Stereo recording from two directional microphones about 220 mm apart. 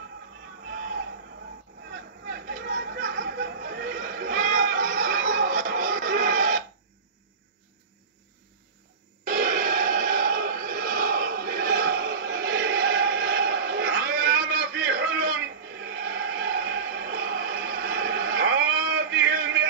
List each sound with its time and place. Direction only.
0.7 s a sound: 40° right (ahead or behind)
1.9 s chatter: 40° right (ahead or behind)
9.3 s music: 40° right (ahead or behind)